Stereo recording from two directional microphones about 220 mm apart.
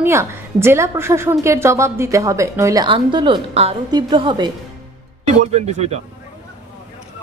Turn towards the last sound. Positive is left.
turn(degrees=-30)  # may be behind; listen again after turning